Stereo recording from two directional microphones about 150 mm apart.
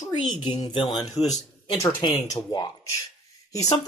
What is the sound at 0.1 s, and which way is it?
Speech, 30° left (ahead or behind).